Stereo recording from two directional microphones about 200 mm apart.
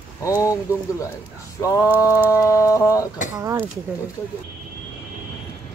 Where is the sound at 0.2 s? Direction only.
15° left (ahead or behind).